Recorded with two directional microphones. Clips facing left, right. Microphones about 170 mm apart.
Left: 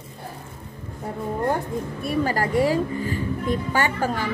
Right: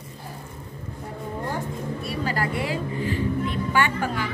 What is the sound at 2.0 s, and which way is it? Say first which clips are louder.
A woman's voice: left 5 dB; 45° left (ahead or behind).